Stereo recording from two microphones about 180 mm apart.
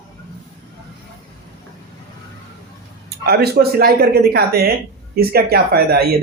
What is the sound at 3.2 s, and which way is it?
Speech, 60° right (ahead or behind).